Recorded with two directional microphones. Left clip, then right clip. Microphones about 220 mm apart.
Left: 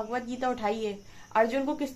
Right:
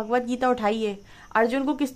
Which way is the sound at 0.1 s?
45° right (ahead or behind).